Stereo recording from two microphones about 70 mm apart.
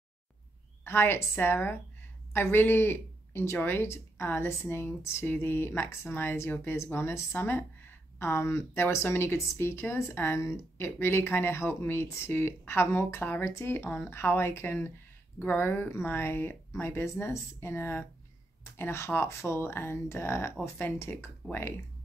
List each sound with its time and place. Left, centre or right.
0.8 s a woman's voice: left